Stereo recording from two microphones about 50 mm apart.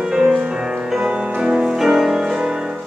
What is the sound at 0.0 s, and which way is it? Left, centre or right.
Music, centre.